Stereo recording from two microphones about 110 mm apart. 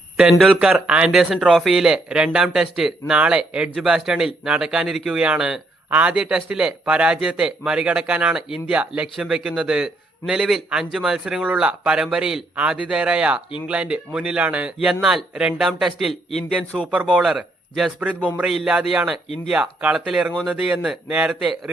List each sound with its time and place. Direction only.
0.2 s a man's voice: 5° right (ahead or behind)